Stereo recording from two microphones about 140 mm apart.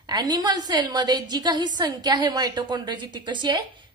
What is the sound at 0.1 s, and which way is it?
A woman's voice, 30° right (ahead or behind).